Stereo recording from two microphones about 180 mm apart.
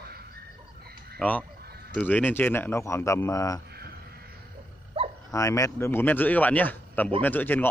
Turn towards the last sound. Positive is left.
turn(degrees=10)  # may be behind; listen again after turning